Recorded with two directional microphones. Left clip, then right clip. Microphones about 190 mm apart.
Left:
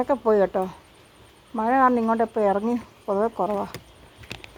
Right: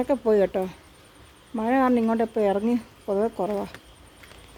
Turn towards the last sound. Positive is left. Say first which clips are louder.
# left 2 dB
turn(degrees=-10)  # may be behind; listen again after turning